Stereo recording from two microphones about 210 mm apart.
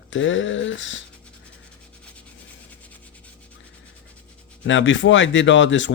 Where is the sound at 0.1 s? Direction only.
65° left (ahead or behind).